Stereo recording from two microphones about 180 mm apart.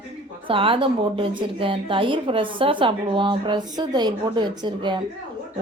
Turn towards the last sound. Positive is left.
turn(degrees=-25)  # may be behind; listen again after turning